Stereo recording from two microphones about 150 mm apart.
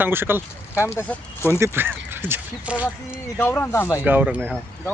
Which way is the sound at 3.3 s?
10° left (ahead or behind).